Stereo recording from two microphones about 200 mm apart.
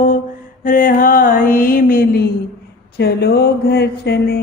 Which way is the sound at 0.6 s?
40° left (ahead or behind).